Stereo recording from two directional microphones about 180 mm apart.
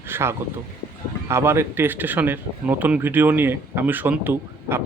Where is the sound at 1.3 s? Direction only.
15° right (ahead or behind).